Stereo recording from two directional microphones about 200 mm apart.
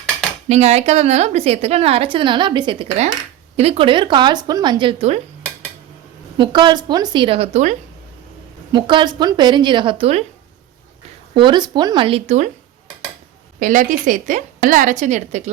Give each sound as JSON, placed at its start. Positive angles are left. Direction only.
{"t": 0.4, "sound": "a woman's voice", "side_deg": -35}
{"t": 6.3, "sound": "speech", "side_deg": -25}
{"t": 8.7, "sound": "speech", "side_deg": -25}
{"t": 11.3, "sound": "speech", "side_deg": -25}
{"t": 13.6, "sound": "a woman's voice", "side_deg": -40}